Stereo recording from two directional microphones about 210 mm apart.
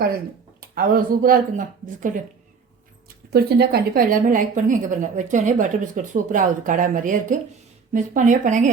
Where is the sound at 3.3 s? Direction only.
50° right (ahead or behind).